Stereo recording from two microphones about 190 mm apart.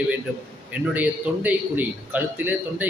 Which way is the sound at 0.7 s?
10° right (ahead or behind).